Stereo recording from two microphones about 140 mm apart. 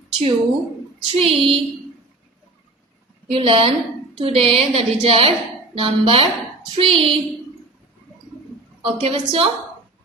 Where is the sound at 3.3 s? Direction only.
40° right (ahead or behind).